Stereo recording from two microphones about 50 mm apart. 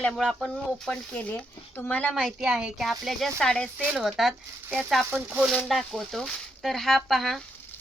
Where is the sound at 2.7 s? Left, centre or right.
Centre.